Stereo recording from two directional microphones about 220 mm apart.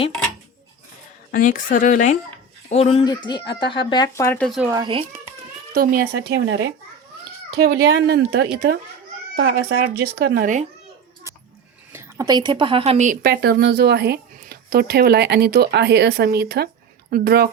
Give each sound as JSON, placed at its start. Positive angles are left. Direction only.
{"t": 1.3, "sound": "speech", "side_deg": 35}
{"t": 4.6, "sound": "a child's voice", "side_deg": -15}
{"t": 5.7, "sound": "a woman's voice", "side_deg": -40}
{"t": 11.9, "sound": "a woman's voice", "side_deg": -10}